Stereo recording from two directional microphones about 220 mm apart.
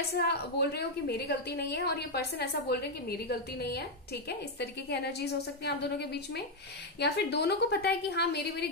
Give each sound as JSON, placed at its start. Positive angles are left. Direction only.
{"t": 0.0, "sound": "a woman's voice", "side_deg": 45}